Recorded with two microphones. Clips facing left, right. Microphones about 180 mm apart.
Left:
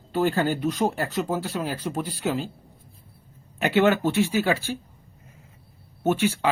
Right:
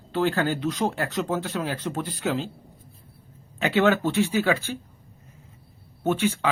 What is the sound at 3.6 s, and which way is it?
Speech, 15° left (ahead or behind).